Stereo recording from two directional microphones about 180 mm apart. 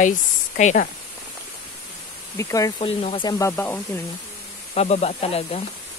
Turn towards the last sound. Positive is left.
turn(degrees=35)  # may be behind; listen again after turning